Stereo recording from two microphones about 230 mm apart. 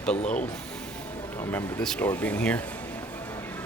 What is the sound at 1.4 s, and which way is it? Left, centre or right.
Speech, centre.